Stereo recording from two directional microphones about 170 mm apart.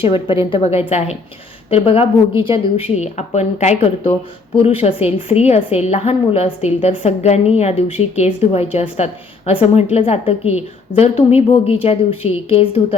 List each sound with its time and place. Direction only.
0.0 s a woman's voice: 30° left (ahead or behind)